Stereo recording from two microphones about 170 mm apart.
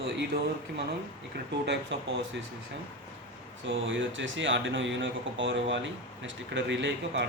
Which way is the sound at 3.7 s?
90° right.